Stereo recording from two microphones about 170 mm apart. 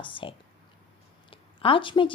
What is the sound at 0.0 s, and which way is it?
Speech, 30° left (ahead or behind).